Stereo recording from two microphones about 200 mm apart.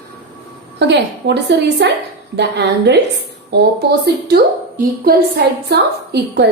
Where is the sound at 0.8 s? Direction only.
60° right (ahead or behind).